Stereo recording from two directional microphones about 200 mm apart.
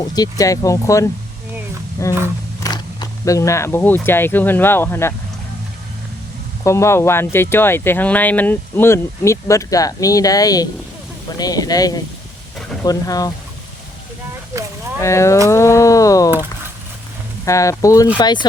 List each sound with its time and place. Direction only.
0.1 s speech: 20° left (ahead or behind)
6.7 s speech: 15° left (ahead or behind)
15.0 s speech: 15° left (ahead or behind)
17.4 s speech: 15° left (ahead or behind)